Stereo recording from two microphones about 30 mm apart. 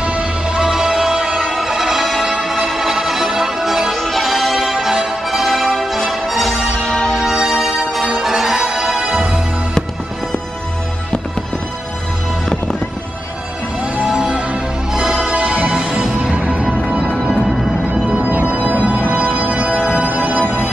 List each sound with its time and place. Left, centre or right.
0.0 s music: right
0.7 s music: centre
3.9 s music: centre
6.5 s music: left
7.3 s music: centre
14.2 s music: right
18.2 s music: right
18.5 s music: right
19.8 s music: right
20.4 s organ: right